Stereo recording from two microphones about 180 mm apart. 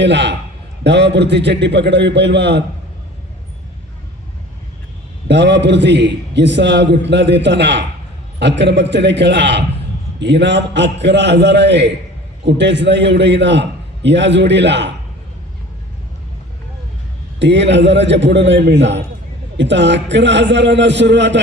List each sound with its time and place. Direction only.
0.0 s a man's voice: 75° right (ahead or behind)
5.3 s a man's voice: 75° right (ahead or behind)
17.4 s a man's voice: 75° right (ahead or behind)